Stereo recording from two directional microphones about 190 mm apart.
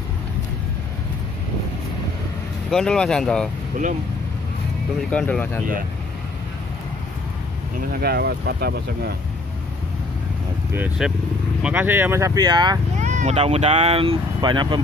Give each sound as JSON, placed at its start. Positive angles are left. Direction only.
{"t": 2.7, "sound": "speech", "side_deg": 5}
{"t": 5.1, "sound": "speech", "side_deg": 5}
{"t": 7.9, "sound": "speech", "side_deg": -55}
{"t": 10.7, "sound": "speech", "side_deg": -5}
{"t": 13.0, "sound": "speech", "side_deg": -40}